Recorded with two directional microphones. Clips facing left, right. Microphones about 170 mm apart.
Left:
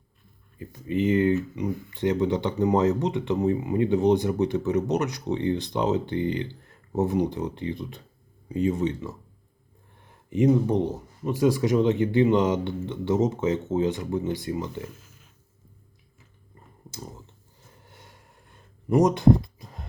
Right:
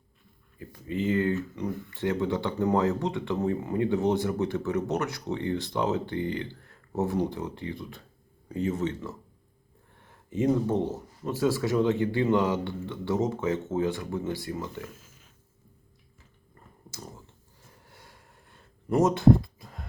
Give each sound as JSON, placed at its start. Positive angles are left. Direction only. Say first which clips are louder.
{"t": 0.6, "sound": "speech", "louder": "left 5 dB", "side_deg": 20}
{"t": 10.2, "sound": "speech", "louder": "left 4 dB", "side_deg": 15}
{"t": 18.5, "sound": "a sound", "louder": "left 4 dB", "side_deg": 15}